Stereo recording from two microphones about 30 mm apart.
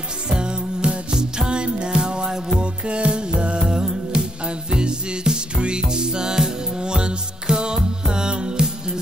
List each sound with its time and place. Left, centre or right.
0.3 s music: right
2.6 s music: right